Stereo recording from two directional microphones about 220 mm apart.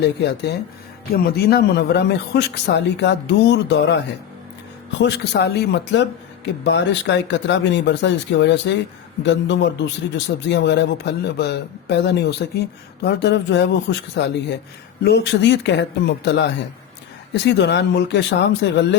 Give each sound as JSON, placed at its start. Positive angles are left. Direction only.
{"t": 0.0, "sound": "a man's voice", "side_deg": 50}